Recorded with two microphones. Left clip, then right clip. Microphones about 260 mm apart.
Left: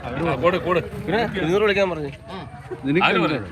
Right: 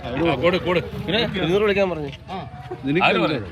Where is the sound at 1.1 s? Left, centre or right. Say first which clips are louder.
Even; centre.